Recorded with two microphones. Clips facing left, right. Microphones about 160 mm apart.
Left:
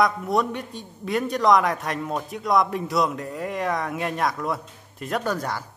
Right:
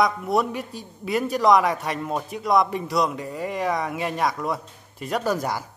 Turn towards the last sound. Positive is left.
turn(degrees=-10)  # may be behind; listen again after turning